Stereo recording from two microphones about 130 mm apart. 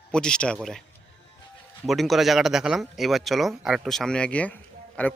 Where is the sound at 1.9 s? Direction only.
Centre (ahead or behind).